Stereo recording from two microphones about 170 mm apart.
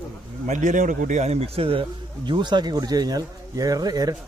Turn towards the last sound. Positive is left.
turn(degrees=-20)  # may be behind; listen again after turning